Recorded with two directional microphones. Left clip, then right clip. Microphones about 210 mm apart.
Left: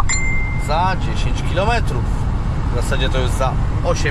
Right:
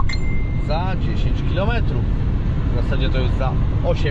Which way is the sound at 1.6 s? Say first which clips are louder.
Left 6 dB; 15° left (ahead or behind).